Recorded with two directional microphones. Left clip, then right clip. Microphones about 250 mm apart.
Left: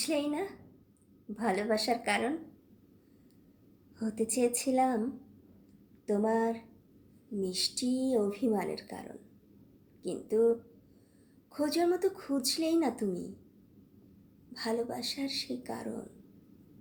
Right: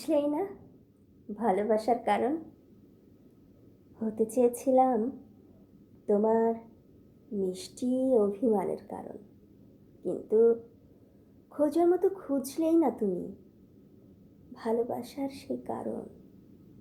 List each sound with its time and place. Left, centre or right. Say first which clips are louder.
0.0 s a woman's voice: right 4 dB; centre
4.3 s a woman's voice: right 5 dB; centre
6.1 s a woman's voice: right 4 dB; centre
14.5 s a woman's voice: right 4 dB; centre